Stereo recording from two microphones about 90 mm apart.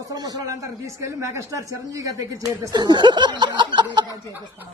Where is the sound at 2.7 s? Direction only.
55° right (ahead or behind).